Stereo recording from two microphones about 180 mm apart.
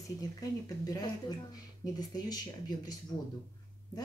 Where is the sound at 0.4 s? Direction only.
20° left (ahead or behind).